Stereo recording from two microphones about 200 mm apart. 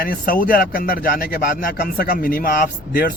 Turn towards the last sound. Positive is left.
turn(degrees=45)  # may be behind; listen again after turning